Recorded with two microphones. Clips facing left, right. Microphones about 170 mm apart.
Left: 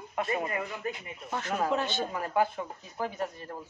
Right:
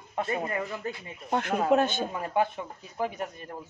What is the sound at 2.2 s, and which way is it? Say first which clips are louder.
Speech: even; 20° right (ahead or behind).